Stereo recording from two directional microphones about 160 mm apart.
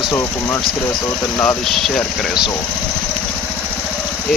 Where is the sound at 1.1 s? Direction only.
20° left (ahead or behind).